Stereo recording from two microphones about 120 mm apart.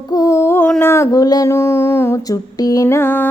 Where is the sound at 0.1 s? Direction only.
25° left (ahead or behind).